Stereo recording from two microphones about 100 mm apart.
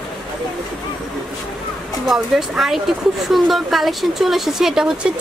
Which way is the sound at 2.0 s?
5° right (ahead or behind).